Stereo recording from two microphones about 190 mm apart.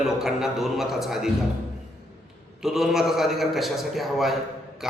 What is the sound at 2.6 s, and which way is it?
A man's voice, centre (ahead or behind).